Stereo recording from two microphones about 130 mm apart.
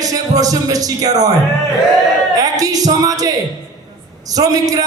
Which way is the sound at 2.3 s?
30° right (ahead or behind).